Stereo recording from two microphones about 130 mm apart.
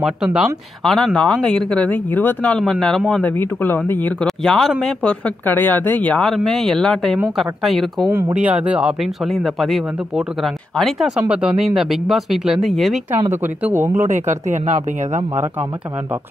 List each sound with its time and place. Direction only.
0.0 s speech: 5° right (ahead or behind)
8.1 s speech: 20° right (ahead or behind); by 13.0 s centre (ahead or behind)
13.3 s speech: 15° right (ahead or behind)
14.0 s speech: 65° right (ahead or behind)